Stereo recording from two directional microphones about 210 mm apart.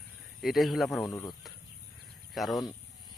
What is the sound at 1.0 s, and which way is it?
Speech, 15° left (ahead or behind).